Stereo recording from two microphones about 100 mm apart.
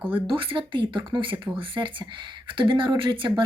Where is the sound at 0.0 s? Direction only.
60° right (ahead or behind).